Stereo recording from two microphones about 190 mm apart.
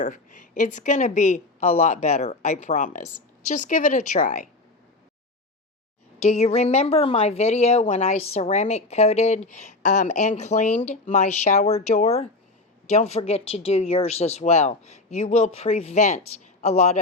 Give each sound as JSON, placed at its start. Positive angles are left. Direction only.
{"t": 0.0, "sound": "a woman's voice", "side_deg": 45}
{"t": 6.1, "sound": "a woman's voice", "side_deg": 35}